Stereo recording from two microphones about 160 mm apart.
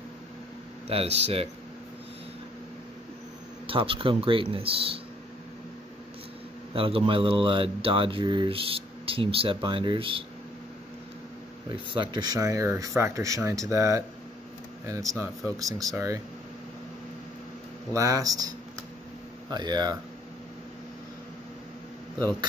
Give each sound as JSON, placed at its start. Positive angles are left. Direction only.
{"t": 0.8, "sound": "speech", "side_deg": -40}
{"t": 3.6, "sound": "speech", "side_deg": -35}
{"t": 6.7, "sound": "speech", "side_deg": -35}
{"t": 11.7, "sound": "speech", "side_deg": -30}
{"t": 17.9, "sound": "speech", "side_deg": -20}
{"t": 19.5, "sound": "speech", "side_deg": -25}